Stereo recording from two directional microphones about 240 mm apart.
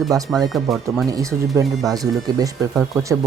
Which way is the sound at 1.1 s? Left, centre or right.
Centre.